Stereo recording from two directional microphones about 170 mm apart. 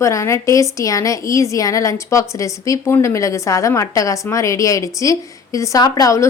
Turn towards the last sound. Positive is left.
turn(degrees=20)  # may be behind; listen again after turning